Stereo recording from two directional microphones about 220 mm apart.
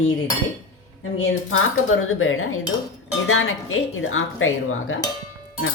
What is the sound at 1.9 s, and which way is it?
Speech, 65° left (ahead or behind).